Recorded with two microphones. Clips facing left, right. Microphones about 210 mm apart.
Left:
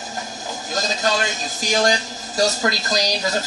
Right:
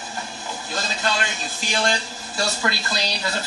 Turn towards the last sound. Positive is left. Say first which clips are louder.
# left 5 dB
turn(degrees=40)  # may be behind; listen again after turning